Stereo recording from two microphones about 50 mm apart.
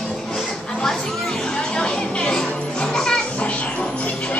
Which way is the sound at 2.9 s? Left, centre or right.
Centre.